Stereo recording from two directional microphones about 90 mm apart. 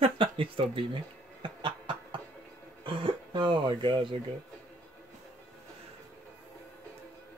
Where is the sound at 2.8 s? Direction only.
70° right (ahead or behind).